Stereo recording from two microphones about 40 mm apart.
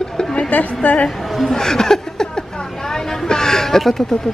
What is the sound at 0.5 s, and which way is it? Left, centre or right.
Speech, left.